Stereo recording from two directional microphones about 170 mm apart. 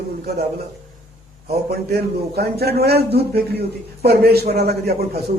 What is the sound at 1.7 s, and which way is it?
A man's voice, 65° right (ahead or behind).